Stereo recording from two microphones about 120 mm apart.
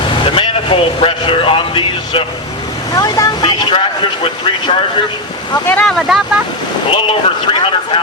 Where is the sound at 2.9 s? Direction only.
30° left (ahead or behind).